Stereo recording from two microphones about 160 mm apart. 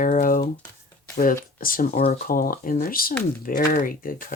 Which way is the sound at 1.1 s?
60° left (ahead or behind).